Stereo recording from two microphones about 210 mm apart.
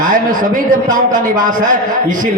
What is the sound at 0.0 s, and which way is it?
A man's voice, 40° right (ahead or behind).